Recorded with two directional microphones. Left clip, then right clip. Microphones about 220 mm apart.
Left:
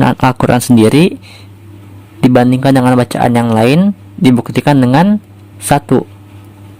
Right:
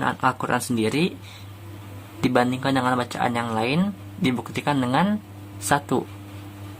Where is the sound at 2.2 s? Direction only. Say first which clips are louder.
Left 12 dB; 40° left (ahead or behind).